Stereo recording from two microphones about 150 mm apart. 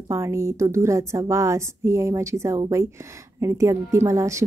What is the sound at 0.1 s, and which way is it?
A woman's voice, 20° right (ahead or behind).